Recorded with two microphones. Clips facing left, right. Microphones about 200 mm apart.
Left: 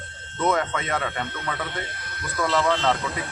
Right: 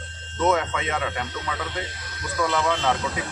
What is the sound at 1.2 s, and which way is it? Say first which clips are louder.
Speech: even; 55° left (ahead or behind).